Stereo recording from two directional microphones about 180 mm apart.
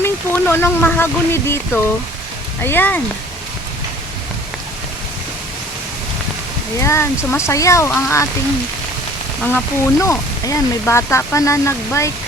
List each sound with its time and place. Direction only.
0.0 s speech: 15° left (ahead or behind)
6.7 s speech: 15° left (ahead or behind)
9.4 s speech: 10° left (ahead or behind)